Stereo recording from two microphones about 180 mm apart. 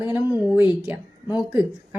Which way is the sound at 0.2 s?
20° left (ahead or behind).